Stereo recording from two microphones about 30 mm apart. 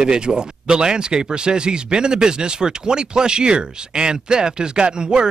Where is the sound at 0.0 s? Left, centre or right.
Right.